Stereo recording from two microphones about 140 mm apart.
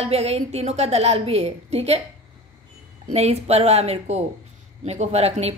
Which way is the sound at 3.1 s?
50° right (ahead or behind).